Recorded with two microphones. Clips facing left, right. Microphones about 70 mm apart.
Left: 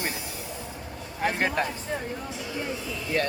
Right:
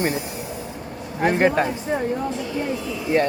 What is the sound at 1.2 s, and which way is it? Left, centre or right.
Speech, right.